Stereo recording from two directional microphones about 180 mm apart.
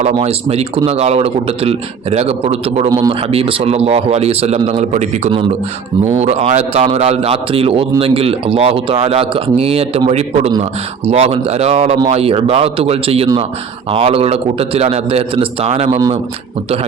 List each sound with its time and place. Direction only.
0.1 s a man's voice: 30° right (ahead or behind)
2.9 s speech: 20° right (ahead or behind)
3.2 s a man's voice: 30° right (ahead or behind)